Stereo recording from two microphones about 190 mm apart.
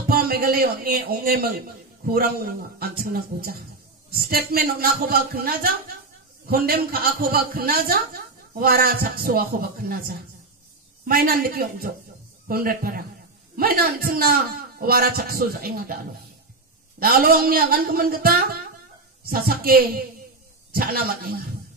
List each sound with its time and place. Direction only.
0.1 s a man's voice: 55° right (ahead or behind)
17.0 s a man's voice: 50° right (ahead or behind)